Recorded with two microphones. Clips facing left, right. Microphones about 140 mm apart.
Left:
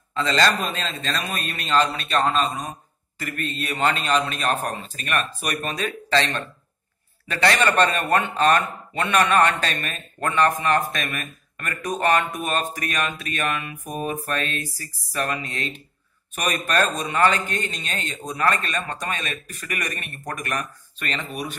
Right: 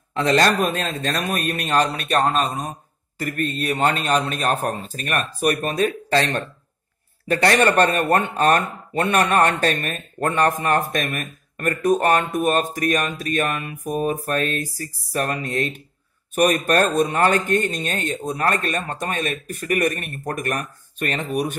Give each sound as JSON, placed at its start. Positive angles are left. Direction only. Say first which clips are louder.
{"t": 0.1, "sound": "a man's voice", "louder": "right 3 dB", "side_deg": -60}
{"t": 2.2, "sound": "speech", "louder": "right 1 dB", "side_deg": -40}